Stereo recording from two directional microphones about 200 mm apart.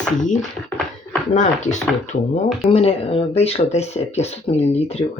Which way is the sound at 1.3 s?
35° left (ahead or behind).